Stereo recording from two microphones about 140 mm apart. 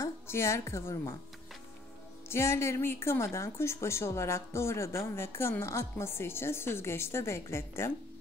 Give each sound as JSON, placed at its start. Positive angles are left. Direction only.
{"t": 0.0, "sound": "a woman's voice", "side_deg": 20}
{"t": 2.2, "sound": "a woman's voice", "side_deg": 20}